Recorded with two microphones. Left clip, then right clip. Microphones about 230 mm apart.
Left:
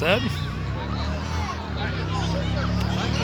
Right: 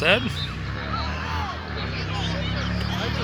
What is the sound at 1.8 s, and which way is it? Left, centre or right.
Vehicle, right.